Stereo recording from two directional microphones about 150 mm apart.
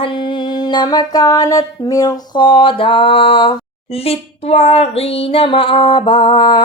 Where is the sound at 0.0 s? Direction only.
30° left (ahead or behind).